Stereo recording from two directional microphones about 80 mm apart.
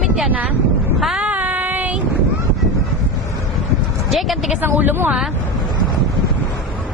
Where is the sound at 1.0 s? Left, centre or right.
Centre.